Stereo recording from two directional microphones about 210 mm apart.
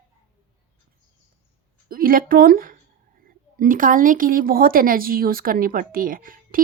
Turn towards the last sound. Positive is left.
turn(degrees=-40)  # may be behind; listen again after turning